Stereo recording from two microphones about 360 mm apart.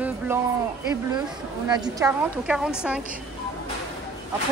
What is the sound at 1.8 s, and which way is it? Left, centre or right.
A woman's voice, centre.